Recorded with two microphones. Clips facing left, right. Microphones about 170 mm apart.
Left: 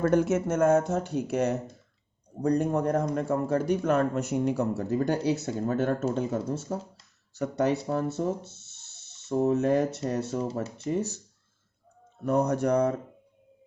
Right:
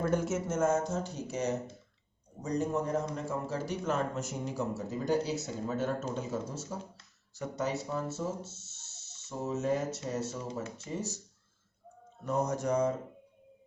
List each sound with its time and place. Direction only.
0.0 s a man's voice: 65° left (ahead or behind)
12.2 s a man's voice: 65° left (ahead or behind)